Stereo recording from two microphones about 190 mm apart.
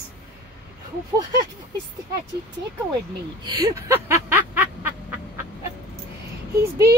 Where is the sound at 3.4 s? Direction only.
15° right (ahead or behind).